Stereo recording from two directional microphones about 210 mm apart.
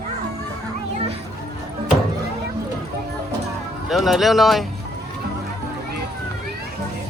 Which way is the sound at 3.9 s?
Centre (ahead or behind).